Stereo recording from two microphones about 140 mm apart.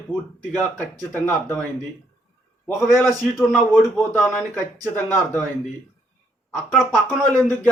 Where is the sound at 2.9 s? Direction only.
Centre (ahead or behind).